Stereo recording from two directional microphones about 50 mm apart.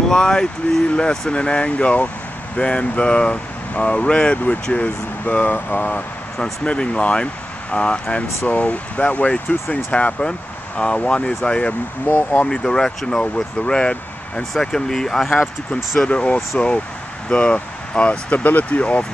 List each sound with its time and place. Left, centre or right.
0.1 s speech: centre; by 5.9 s left
6.4 s speech: centre
12.1 s speech: left
12.4 s speech: centre
16.0 s speech: left
18.3 s speech: left